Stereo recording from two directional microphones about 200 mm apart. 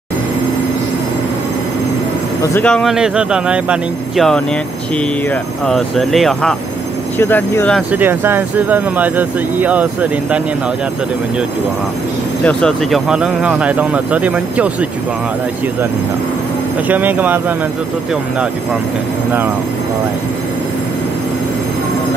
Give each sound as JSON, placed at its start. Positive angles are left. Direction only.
{"t": 2.4, "sound": "speech", "side_deg": 10}
{"t": 7.9, "sound": "speech", "side_deg": -10}
{"t": 12.4, "sound": "speech", "side_deg": 5}
{"t": 16.8, "sound": "speech", "side_deg": -10}